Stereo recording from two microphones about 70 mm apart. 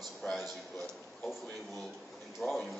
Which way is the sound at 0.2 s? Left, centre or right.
Left.